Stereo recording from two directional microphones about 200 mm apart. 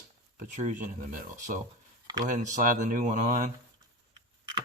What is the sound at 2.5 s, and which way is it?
Speech, 40° right (ahead or behind).